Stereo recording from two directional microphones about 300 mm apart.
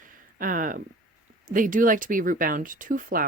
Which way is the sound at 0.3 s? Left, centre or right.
Right.